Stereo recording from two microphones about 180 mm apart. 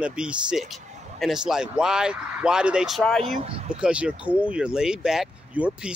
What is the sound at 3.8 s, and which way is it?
Speech, 5° right (ahead or behind).